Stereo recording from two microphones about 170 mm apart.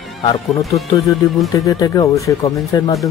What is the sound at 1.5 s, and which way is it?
Speech, 20° left (ahead or behind).